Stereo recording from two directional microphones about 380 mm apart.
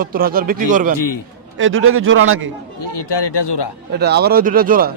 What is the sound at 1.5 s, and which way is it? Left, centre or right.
Speech, right.